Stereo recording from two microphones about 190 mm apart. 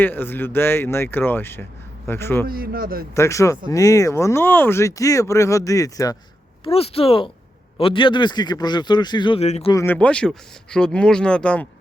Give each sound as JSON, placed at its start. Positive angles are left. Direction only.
{"t": 0.0, "sound": "speech", "side_deg": 10}
{"t": 2.5, "sound": "speech", "side_deg": -50}
{"t": 3.2, "sound": "speech", "side_deg": 15}
{"t": 6.7, "sound": "a man's voice", "side_deg": 30}
{"t": 9.7, "sound": "speech", "side_deg": 10}